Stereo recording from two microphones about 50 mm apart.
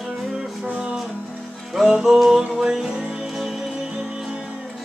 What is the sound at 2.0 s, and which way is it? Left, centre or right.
Music, centre.